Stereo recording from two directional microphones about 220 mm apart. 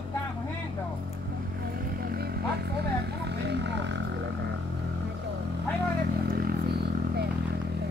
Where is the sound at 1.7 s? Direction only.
45° right (ahead or behind).